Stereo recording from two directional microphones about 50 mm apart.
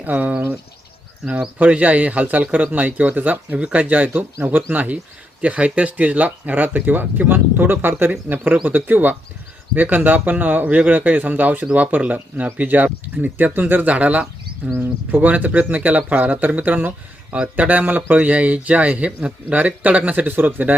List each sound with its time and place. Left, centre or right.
0.0 s a man's voice: right
1.5 s a man's voice: right
8.6 s a man's voice: right
13.9 s a man's voice: right
17.3 s speech: right
17.7 s a man's voice: right